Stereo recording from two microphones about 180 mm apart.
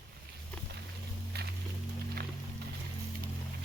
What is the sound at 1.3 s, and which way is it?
Music, 60° right (ahead or behind).